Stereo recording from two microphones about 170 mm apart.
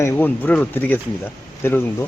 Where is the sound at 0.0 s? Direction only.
10° left (ahead or behind).